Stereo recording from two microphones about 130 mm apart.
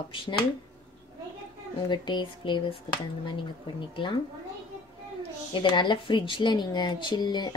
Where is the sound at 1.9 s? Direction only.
35° left (ahead or behind).